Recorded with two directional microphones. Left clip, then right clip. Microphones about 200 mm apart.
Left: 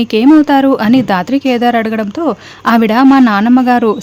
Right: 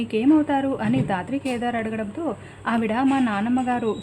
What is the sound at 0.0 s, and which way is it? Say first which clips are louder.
Speech: left 12 dB; 55° left (ahead or behind).